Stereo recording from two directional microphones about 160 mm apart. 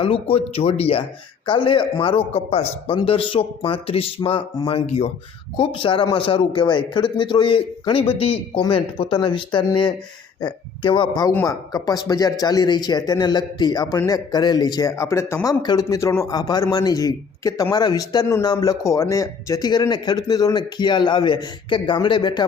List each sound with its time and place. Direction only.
0.0 s a man's voice: 35° left (ahead or behind)